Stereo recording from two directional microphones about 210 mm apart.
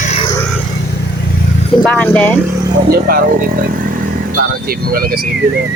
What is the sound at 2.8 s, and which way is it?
Speech, 45° right (ahead or behind).